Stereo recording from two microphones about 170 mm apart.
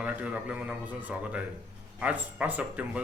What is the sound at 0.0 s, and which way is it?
A man's voice, 10° right (ahead or behind).